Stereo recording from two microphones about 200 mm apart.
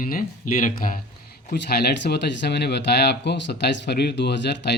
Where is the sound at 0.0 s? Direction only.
45° left (ahead or behind).